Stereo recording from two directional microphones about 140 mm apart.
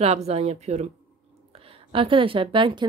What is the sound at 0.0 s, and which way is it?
Speech, 50° right (ahead or behind).